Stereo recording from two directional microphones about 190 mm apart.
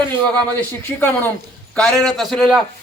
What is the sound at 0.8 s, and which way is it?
A man's voice, 10° left (ahead or behind).